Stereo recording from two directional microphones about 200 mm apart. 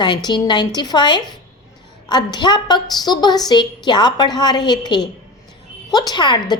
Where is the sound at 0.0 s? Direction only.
20° left (ahead or behind).